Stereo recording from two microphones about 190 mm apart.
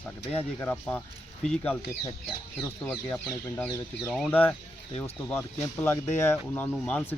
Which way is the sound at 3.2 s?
5° left (ahead or behind).